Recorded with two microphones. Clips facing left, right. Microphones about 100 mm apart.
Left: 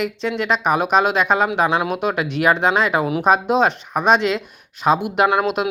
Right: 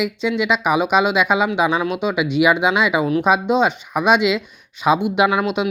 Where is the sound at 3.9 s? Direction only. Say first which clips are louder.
Right 2 dB; 35° left (ahead or behind).